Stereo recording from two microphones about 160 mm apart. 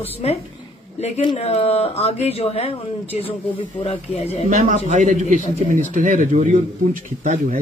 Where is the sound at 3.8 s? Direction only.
40° left (ahead or behind).